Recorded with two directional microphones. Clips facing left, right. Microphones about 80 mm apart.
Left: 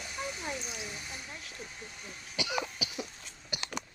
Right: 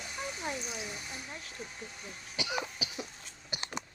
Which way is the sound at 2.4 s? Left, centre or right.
Right.